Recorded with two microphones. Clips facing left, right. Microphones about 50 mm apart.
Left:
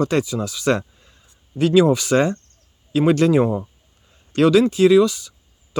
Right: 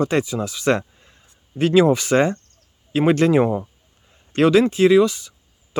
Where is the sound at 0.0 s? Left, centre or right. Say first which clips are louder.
Even; right.